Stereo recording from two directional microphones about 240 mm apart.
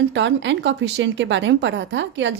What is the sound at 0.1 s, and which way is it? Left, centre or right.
Speech, right.